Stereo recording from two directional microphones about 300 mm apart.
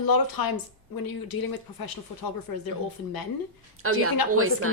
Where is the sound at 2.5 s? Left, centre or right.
Left.